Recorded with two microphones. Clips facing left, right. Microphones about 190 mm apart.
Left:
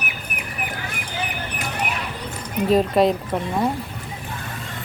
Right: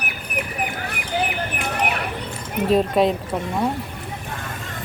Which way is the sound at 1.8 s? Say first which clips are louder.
Right 4 dB; 60° right (ahead or behind).